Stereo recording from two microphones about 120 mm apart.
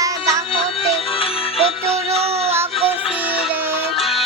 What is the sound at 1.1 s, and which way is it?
Music, 50° left (ahead or behind).